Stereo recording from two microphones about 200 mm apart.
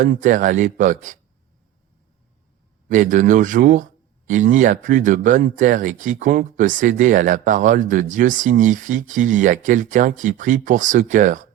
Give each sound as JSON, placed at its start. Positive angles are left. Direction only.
{"t": 0.0, "sound": "speech", "side_deg": -40}
{"t": 2.9, "sound": "speech", "side_deg": -40}